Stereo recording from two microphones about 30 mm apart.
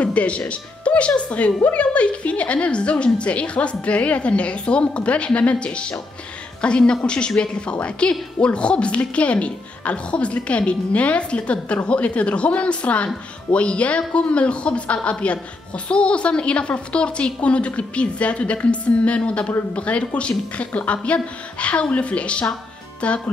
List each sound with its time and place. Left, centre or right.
0.0 s a woman's voice: left
5.7 s a woman's voice: left
10.9 s a woman's voice: left